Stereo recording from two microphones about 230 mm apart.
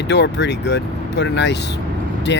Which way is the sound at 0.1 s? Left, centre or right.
Left.